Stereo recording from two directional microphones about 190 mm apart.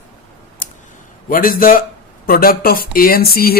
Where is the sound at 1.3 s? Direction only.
45° left (ahead or behind).